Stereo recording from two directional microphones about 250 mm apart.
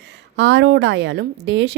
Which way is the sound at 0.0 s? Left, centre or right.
Right.